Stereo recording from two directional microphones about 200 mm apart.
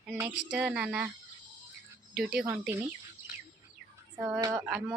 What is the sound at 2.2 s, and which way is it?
Speech, 5° right (ahead or behind).